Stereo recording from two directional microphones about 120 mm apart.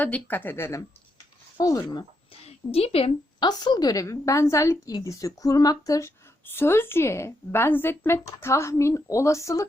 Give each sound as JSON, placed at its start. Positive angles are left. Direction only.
{"t": 0.0, "sound": "a woman's voice", "side_deg": 15}
{"t": 2.5, "sound": "a woman's voice", "side_deg": 55}
{"t": 3.4, "sound": "a woman's voice", "side_deg": 35}
{"t": 6.4, "sound": "a woman's voice", "side_deg": 20}